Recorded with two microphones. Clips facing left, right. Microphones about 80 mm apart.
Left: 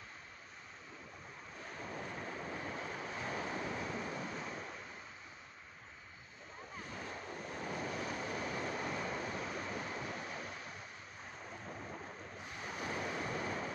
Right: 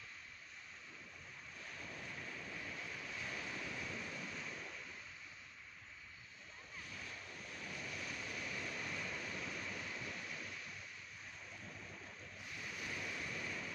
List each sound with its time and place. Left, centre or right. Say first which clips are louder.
1.6 s waves: left 7 dB; left
6.8 s waves: left 6 dB; left
11.4 s thunder: left 9 dB; left
12.4 s waves: left 5 dB; left